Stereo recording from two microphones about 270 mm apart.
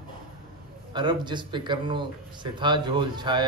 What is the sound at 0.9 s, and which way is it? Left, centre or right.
A man's voice, centre.